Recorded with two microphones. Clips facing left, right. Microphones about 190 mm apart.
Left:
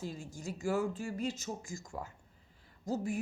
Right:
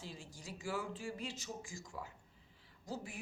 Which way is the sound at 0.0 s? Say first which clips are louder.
Left 9 dB; 45° left (ahead or behind).